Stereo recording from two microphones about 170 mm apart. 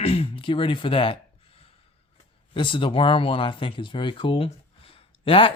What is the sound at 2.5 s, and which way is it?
Speech, 30° left (ahead or behind).